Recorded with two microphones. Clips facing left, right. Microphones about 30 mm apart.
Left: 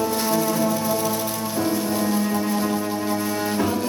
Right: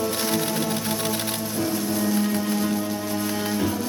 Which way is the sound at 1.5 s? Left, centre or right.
Centre.